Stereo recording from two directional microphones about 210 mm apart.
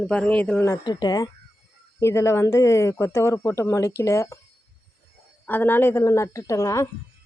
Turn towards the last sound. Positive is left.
turn(degrees=15)  # may be behind; listen again after turning